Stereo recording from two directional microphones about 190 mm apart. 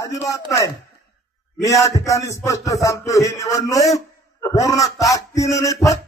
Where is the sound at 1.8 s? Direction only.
15° left (ahead or behind).